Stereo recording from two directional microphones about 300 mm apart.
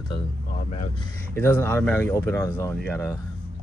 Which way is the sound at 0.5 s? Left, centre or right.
Left.